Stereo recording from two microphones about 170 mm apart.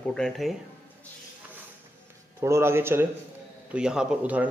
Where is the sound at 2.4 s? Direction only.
15° right (ahead or behind).